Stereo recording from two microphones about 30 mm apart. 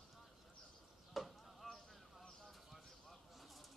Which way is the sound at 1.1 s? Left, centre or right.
Centre.